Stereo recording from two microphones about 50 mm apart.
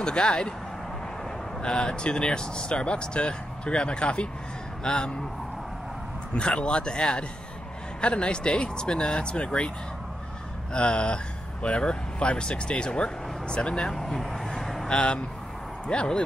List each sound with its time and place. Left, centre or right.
0.0 s speech: centre
1.6 s speech: centre
6.3 s speech: left
10.7 s speech: centre
13.8 s vehicle: centre
14.9 s speech: centre